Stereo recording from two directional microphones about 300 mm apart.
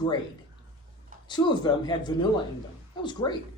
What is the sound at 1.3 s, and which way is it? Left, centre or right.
Speech, centre.